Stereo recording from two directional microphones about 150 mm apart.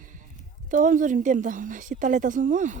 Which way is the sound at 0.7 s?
60° right (ahead or behind).